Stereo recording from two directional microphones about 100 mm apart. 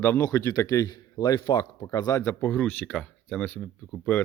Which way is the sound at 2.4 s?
15° left (ahead or behind).